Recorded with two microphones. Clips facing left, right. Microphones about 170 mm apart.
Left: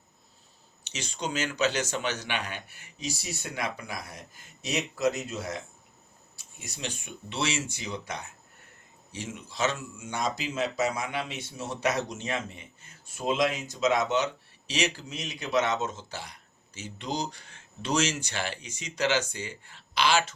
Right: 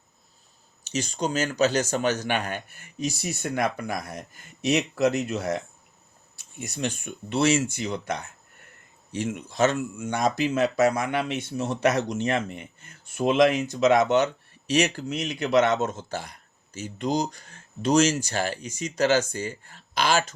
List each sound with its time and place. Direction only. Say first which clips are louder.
0.9 s speech: right 7 dB; 40° right (ahead or behind)
9.1 s speech: right 8 dB; 55° right (ahead or behind)